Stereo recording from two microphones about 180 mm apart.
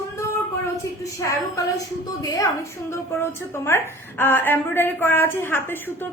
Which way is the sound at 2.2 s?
20° left (ahead or behind).